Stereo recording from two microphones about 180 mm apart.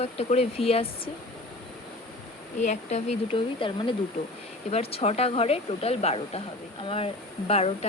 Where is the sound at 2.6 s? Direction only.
40° left (ahead or behind).